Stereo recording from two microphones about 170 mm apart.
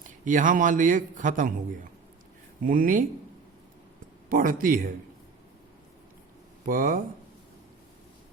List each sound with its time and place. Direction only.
0.0 s a man's voice: 50° right (ahead or behind)
2.6 s speech: 55° right (ahead or behind)
4.3 s speech: 55° right (ahead or behind)
6.7 s speech: 55° right (ahead or behind)